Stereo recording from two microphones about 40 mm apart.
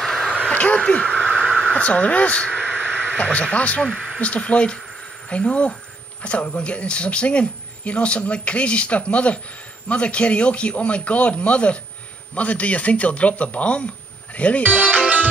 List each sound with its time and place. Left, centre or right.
0.6 s crow: left
1.5 s speech: left
2.4 s crow: left
3.5 s speech: left
14.6 s speech: right